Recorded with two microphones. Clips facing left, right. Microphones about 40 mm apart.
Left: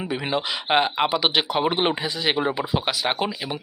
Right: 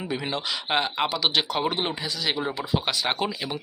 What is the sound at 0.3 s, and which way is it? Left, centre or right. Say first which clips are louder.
Speech: left 7 dB; centre.